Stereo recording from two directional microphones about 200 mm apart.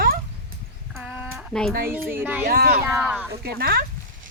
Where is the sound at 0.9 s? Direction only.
5° right (ahead or behind).